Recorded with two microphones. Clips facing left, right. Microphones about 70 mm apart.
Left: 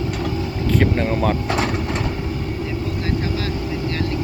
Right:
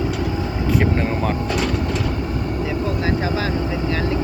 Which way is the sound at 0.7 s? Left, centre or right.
Centre.